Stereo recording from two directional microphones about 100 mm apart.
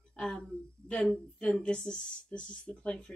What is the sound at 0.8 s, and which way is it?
A woman's voice, 10° left (ahead or behind).